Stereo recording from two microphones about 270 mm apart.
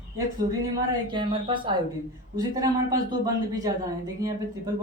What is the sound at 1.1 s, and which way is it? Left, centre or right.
Speech, centre.